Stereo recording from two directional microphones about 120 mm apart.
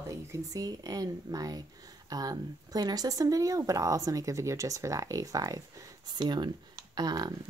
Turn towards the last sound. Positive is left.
turn(degrees=-35)  # may be behind; listen again after turning